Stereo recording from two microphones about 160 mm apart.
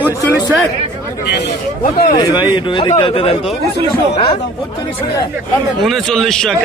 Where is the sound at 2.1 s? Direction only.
30° left (ahead or behind).